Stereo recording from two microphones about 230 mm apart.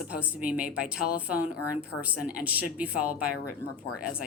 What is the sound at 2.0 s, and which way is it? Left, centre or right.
A woman's voice, centre.